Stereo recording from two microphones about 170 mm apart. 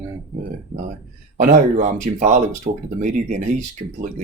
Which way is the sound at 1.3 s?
45° right (ahead or behind).